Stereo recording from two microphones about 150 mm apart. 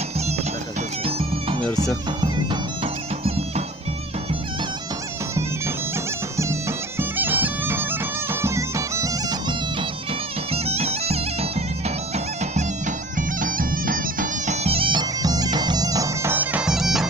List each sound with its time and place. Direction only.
1.0 s bagpipes: 35° right (ahead or behind)
6.3 s bagpipes: 20° right (ahead or behind)
10.5 s bagpipes: 45° right (ahead or behind); by 17.1 s centre (ahead or behind)